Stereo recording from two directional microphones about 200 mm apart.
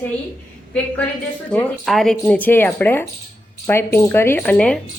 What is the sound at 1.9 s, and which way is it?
A woman's voice, centre (ahead or behind).